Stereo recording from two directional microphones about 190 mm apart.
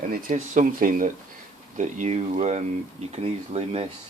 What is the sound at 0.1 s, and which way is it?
Speech, 40° right (ahead or behind).